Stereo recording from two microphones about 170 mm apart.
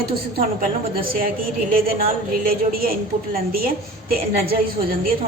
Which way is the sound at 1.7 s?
60° right (ahead or behind).